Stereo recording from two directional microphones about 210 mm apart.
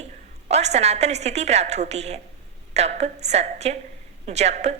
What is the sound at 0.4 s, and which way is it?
Speech, 30° right (ahead or behind).